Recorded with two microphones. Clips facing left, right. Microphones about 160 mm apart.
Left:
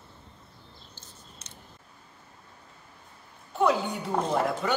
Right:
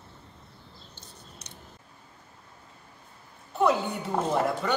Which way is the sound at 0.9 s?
65° right (ahead or behind).